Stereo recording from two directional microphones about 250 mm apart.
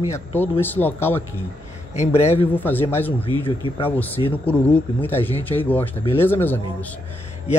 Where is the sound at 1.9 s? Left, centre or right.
Left.